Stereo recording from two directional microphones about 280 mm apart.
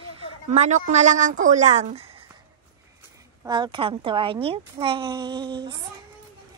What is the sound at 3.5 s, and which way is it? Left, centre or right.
A woman's voice, centre.